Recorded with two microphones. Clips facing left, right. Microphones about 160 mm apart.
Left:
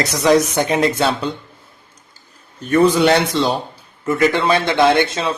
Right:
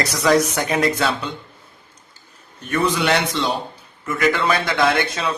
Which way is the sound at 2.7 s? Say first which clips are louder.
Left 7 dB; 35° left (ahead or behind).